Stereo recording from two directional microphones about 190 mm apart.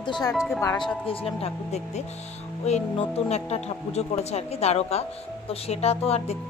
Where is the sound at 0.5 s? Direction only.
20° left (ahead or behind).